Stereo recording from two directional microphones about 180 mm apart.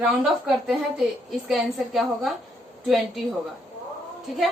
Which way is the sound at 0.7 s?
5° right (ahead or behind).